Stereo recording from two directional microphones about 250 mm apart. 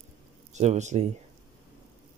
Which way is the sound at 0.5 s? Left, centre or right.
Right.